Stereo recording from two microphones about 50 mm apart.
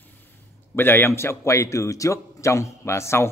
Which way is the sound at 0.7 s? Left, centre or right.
Left.